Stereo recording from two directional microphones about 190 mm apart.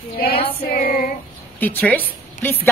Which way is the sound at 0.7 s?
50° left (ahead or behind).